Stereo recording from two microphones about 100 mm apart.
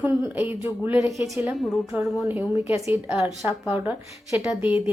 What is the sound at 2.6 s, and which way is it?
Speech, 25° right (ahead or behind).